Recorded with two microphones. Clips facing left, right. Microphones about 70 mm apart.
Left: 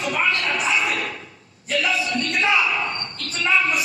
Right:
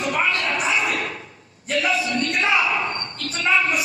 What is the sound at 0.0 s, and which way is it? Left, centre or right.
Music, right.